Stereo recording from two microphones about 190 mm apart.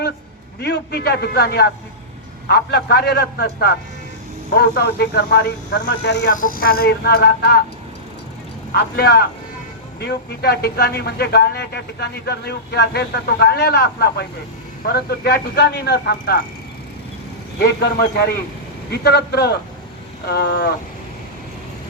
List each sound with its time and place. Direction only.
0.6 s speech: 60° left (ahead or behind)
6.3 s speech: 45° left (ahead or behind)
8.7 s speech: 55° left (ahead or behind)
17.6 s speech: 60° left (ahead or behind)